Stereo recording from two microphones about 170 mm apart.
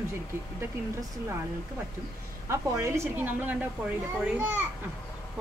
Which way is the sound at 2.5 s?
15° right (ahead or behind).